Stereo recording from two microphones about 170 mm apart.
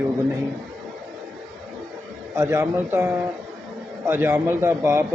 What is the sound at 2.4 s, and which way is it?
Speech, 15° right (ahead or behind).